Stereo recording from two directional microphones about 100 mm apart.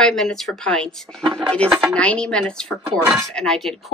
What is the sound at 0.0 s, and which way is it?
A woman's voice, 5° left (ahead or behind).